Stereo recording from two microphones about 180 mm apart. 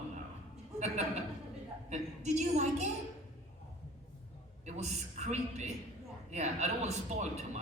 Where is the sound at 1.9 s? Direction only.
40° right (ahead or behind).